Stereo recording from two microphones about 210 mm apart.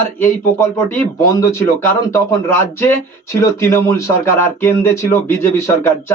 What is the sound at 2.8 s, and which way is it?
Speech, 10° left (ahead or behind).